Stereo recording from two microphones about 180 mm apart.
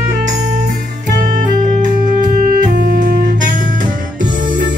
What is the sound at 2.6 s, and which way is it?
Music, 50° right (ahead or behind).